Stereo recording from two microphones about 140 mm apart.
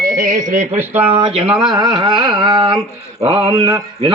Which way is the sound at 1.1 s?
40° right (ahead or behind).